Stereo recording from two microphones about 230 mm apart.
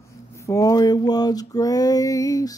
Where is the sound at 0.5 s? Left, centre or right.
Centre.